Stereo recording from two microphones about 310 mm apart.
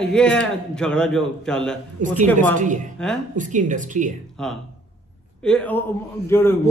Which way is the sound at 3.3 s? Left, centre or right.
Right.